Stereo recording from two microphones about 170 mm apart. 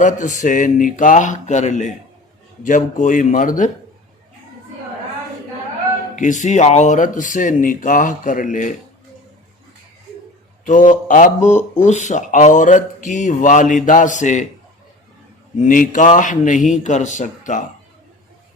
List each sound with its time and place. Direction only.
0.0 s speech: 45° left (ahead or behind)
6.1 s speech: 50° left (ahead or behind)
10.7 s speech: 50° left (ahead or behind)
15.5 s speech: 50° left (ahead or behind)